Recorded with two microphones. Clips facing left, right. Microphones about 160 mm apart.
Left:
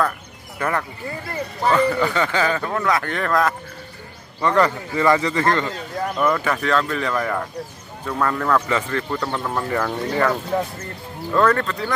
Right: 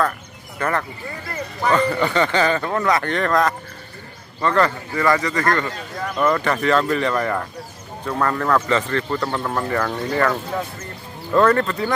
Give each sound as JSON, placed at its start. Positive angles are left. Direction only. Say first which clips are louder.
{"t": 0.6, "sound": "speech", "louder": "right 1 dB", "side_deg": 10}
{"t": 4.4, "sound": "a man's voice", "louder": "left 1 dB", "side_deg": 15}
{"t": 6.1, "sound": "speech", "louder": "right 2 dB", "side_deg": 0}
{"t": 9.1, "sound": "speech", "louder": "even", "side_deg": 0}
{"t": 10.5, "sound": "speech", "louder": "left 4 dB", "side_deg": 40}
{"t": 11.3, "sound": "speech", "louder": "right 2 dB", "side_deg": -5}